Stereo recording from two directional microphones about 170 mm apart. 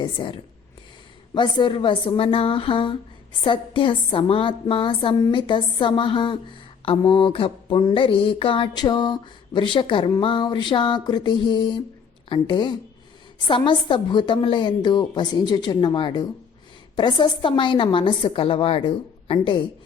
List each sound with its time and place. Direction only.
0.0 s a woman's voice: 25° left (ahead or behind)